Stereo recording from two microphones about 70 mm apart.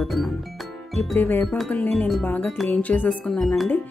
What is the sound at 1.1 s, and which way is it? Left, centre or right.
Speech, left.